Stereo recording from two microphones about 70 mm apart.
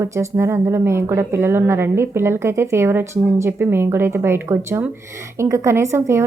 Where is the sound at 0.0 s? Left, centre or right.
Right.